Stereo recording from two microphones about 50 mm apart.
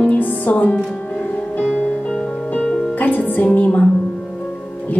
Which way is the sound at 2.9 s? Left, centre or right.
Left.